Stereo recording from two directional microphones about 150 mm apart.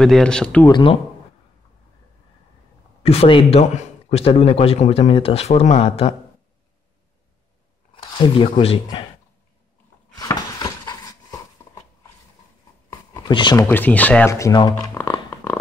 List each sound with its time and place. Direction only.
0.0 s speech: 5° left (ahead or behind)
0.7 s speech: 30° left (ahead or behind)
3.0 s a man's voice: 40° left (ahead or behind)
7.9 s speech: 35° left (ahead or behind)
10.1 s a sound: 25° left (ahead or behind)
12.9 s a sound: 30° left (ahead or behind)
13.7 s speech: 10° left (ahead or behind)
14.5 s speech: 30° left (ahead or behind)
15.0 s music: 15° left (ahead or behind)